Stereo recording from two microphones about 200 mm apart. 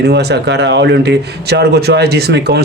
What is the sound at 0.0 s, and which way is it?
Speech, 55° right (ahead or behind).